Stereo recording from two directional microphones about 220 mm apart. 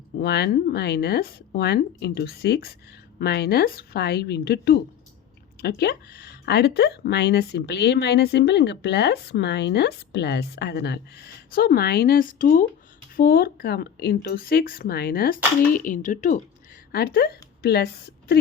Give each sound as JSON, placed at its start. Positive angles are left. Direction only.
{"t": 0.2, "sound": "speech", "side_deg": 45}